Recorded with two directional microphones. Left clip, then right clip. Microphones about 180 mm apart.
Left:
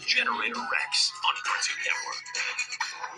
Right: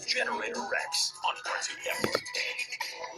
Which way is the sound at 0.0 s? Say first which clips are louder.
Left 5 dB; 20° left (ahead or behind).